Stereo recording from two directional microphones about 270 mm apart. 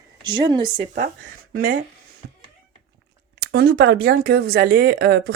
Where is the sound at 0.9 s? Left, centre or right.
Right.